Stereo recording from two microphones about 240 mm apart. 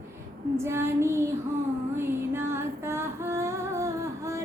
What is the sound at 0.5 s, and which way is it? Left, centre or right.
Female singing, centre.